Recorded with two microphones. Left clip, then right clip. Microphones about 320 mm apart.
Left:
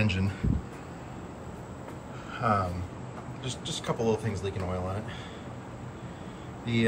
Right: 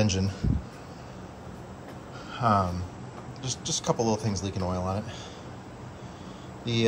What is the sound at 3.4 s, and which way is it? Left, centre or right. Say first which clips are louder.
A man's voice: right 4 dB; centre.